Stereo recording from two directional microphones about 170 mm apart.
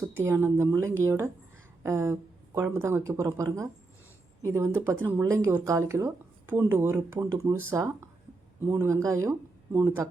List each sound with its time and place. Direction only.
0.2 s speech: 15° right (ahead or behind)